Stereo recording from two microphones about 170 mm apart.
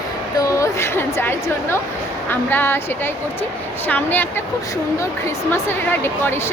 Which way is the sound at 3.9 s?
10° left (ahead or behind).